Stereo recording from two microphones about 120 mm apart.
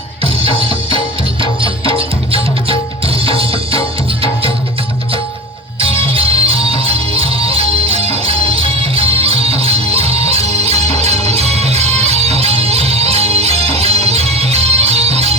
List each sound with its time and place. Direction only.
0.9 s music: 45° right (ahead or behind)
5.8 s music: 50° right (ahead or behind)